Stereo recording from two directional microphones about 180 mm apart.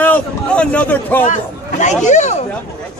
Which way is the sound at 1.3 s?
40° left (ahead or behind).